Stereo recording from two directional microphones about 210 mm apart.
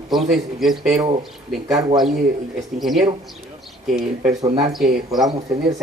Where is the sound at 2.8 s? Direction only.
Centre (ahead or behind).